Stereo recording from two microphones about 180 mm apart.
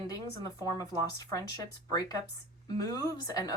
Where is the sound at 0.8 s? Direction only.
20° left (ahead or behind).